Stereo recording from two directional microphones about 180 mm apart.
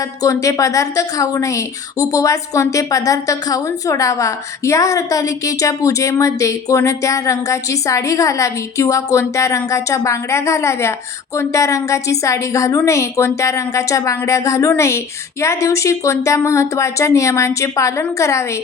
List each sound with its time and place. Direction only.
0.2 s a woman's voice: 20° left (ahead or behind)